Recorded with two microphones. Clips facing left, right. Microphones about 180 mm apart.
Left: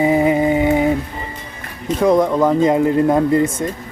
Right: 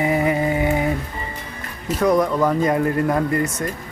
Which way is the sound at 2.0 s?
25° left (ahead or behind).